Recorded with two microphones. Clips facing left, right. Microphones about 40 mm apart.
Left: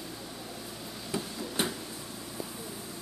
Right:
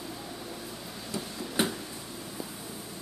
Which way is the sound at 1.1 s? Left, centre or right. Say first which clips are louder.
Right 2 dB; centre.